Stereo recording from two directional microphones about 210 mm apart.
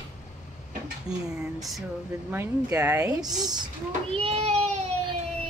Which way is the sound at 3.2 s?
20° right (ahead or behind).